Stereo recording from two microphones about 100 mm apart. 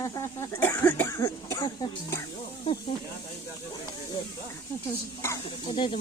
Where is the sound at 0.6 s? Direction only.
20° left (ahead or behind).